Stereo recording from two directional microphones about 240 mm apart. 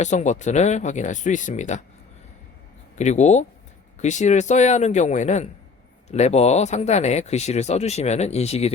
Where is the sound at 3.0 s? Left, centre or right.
Left.